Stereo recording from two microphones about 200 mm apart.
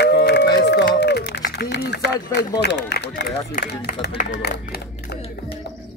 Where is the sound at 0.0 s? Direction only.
55° left (ahead or behind).